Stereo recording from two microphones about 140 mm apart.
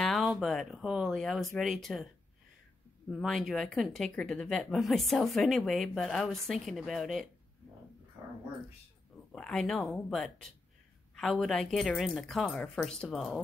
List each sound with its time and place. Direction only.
0.0 s speech: centre (ahead or behind)
3.1 s speech: centre (ahead or behind)
8.2 s dog: 20° right (ahead or behind)
9.3 s speech: 5° left (ahead or behind)